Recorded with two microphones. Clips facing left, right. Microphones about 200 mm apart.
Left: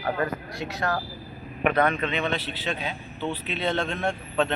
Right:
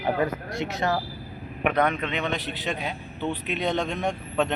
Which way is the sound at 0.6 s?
25° right (ahead or behind).